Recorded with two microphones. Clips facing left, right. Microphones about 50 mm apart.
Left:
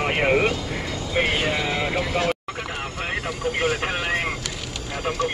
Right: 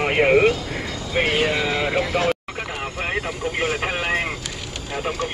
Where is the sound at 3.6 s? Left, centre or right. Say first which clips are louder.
Right 1 dB; centre.